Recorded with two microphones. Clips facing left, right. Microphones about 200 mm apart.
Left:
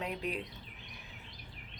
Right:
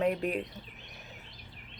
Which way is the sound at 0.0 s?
50° right (ahead or behind).